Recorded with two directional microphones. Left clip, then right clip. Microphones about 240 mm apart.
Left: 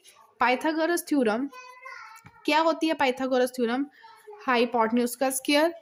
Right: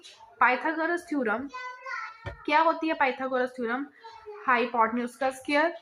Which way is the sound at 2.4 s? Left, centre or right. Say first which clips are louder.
Even; left.